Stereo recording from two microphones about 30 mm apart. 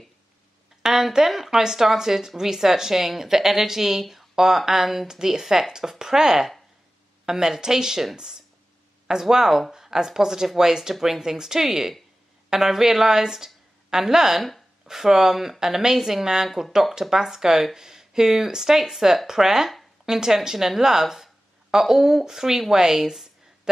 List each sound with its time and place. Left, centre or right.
0.8 s speech: centre
9.3 s speech: centre